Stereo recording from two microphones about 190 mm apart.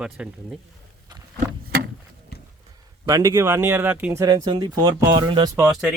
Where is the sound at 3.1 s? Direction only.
20° right (ahead or behind).